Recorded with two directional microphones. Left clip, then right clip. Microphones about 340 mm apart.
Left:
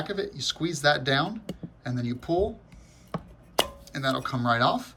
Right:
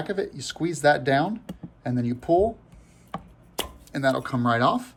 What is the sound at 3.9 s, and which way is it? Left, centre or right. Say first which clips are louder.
Speech: right 4 dB; centre.